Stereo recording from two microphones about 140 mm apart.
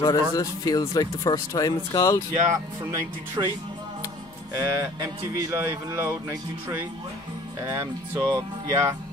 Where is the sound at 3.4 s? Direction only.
25° right (ahead or behind).